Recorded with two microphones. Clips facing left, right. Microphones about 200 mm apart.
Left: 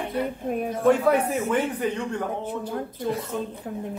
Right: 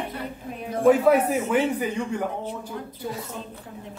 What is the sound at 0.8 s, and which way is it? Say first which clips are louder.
Speech: right 3 dB; 5° right (ahead or behind).